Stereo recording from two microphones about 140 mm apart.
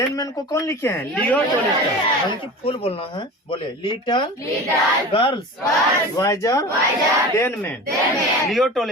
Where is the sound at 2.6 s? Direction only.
45° left (ahead or behind).